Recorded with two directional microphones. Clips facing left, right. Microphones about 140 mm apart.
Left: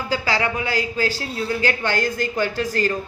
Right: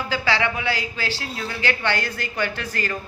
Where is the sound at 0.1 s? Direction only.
40° left (ahead or behind).